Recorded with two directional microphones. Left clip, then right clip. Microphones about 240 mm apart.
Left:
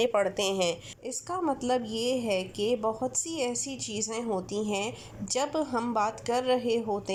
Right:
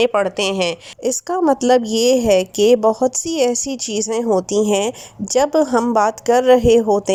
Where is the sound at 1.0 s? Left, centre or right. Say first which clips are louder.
Right 14 dB; right.